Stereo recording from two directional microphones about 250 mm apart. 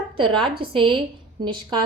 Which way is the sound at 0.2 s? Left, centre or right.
Centre.